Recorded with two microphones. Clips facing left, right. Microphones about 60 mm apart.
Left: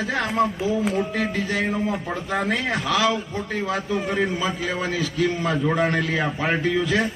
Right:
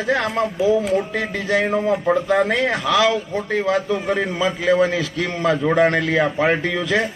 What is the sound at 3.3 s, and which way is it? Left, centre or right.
A man's voice, right.